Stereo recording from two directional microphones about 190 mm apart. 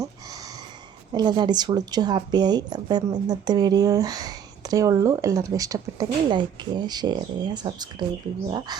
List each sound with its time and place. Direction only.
1.1 s speech: 20° right (ahead or behind)